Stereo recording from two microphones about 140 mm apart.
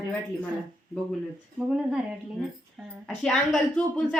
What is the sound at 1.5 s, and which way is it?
A woman's voice, 5° right (ahead or behind).